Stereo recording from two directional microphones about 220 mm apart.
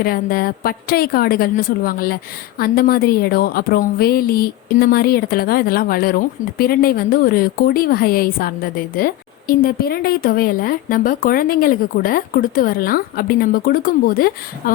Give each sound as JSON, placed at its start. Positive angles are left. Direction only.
{"t": 0.0, "sound": "a woman's voice", "side_deg": 40}